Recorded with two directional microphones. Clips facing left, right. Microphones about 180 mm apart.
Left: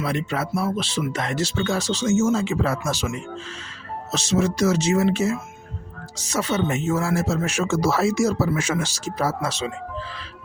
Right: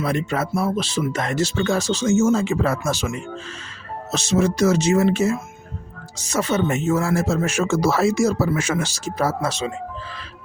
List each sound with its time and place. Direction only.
0.0 s speech: 45° right (ahead or behind)
4.1 s speech: 55° right (ahead or behind)